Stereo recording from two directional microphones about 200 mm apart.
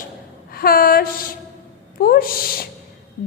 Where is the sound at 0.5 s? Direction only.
50° left (ahead or behind).